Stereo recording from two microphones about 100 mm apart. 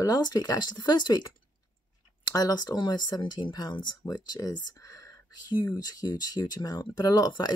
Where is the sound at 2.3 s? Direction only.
40° left (ahead or behind).